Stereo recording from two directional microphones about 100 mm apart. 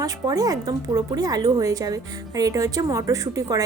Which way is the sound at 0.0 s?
35° right (ahead or behind).